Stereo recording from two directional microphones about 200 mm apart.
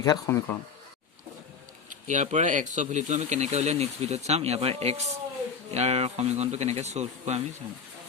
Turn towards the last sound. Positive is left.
turn(degrees=-35)  # may be behind; listen again after turning